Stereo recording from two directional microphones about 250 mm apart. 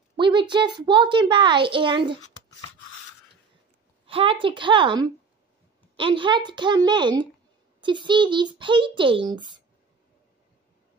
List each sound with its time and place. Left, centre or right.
0.1 s a child's voice: centre
4.0 s a child's voice: right